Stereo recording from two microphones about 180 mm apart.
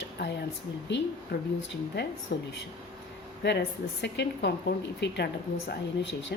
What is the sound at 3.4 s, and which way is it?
A woman's voice, 70° left (ahead or behind).